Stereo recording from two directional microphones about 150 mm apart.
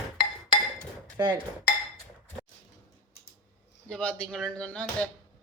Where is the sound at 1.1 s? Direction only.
25° right (ahead or behind).